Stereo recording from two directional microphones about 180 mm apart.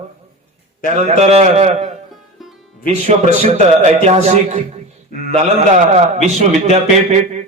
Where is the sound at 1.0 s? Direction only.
40° right (ahead or behind).